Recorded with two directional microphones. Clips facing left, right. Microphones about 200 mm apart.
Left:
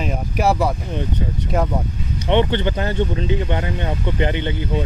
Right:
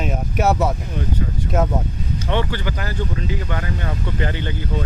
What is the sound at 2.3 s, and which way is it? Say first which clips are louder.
Speech: left 7 dB; 25° left (ahead or behind).